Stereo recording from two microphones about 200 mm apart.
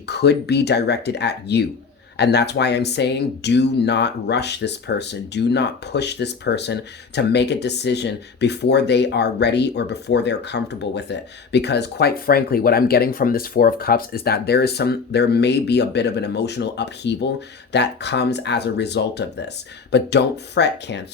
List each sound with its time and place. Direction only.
0.1 s speech: 55° left (ahead or behind)